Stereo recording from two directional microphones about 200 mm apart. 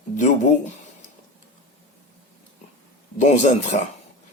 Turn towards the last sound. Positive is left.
turn(degrees=35)  # may be behind; listen again after turning